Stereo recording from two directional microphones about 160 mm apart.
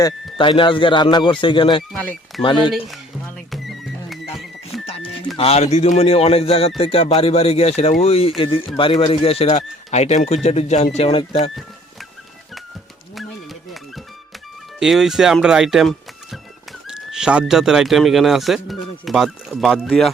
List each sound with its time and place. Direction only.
0.0 s speech: 30° left (ahead or behind)
1.9 s speech: 5° left (ahead or behind)
2.4 s speech: 30° left (ahead or behind)
2.7 s speech: centre (ahead or behind)
3.5 s music: centre (ahead or behind)
5.4 s speech: 40° left (ahead or behind)
14.8 s speech: centre (ahead or behind)